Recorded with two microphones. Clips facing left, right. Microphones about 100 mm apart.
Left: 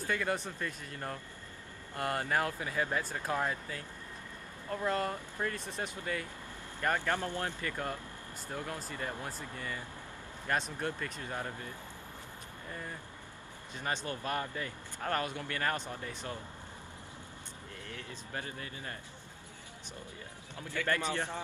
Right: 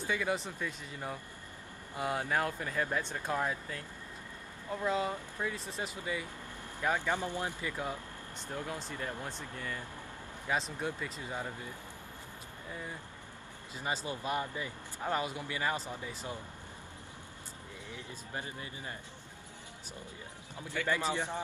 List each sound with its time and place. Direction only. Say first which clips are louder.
0.0 s speech: even; 5° right (ahead or behind)
13.7 s speech: even; 10° right (ahead or behind)
17.8 s speech: even; 15° right (ahead or behind)
20.5 s speech: even; 20° right (ahead or behind)